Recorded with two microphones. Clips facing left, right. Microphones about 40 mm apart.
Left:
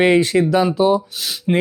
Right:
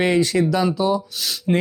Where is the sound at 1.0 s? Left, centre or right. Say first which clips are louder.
Left 1 dB; centre.